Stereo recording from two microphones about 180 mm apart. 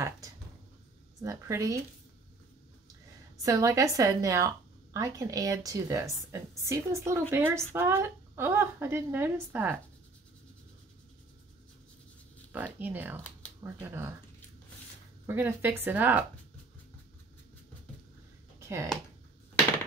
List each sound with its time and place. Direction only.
1.2 s a woman's voice: 15° right (ahead or behind)
3.4 s a woman's voice: 20° right (ahead or behind)
12.5 s a woman's voice: 10° right (ahead or behind)
15.2 s a woman's voice: 10° right (ahead or behind)
18.6 s a sound: 15° right (ahead or behind)